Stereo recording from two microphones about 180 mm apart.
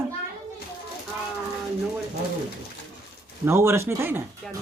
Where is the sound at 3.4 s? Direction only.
15° right (ahead or behind).